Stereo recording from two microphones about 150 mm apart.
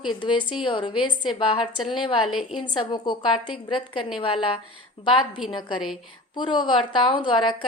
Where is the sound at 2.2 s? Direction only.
Centre (ahead or behind).